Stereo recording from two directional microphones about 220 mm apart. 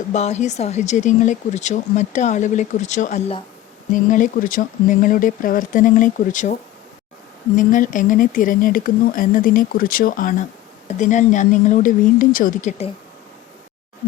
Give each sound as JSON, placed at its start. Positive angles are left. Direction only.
{"t": 0.1, "sound": "speech", "side_deg": 30}